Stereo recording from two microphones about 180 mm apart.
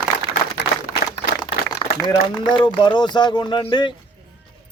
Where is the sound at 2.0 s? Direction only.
25° left (ahead or behind).